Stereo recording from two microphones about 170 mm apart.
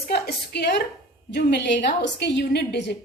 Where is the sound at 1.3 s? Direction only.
85° left.